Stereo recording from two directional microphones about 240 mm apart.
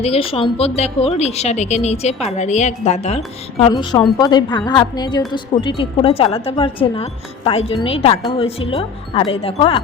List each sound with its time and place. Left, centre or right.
0.0 s speech: left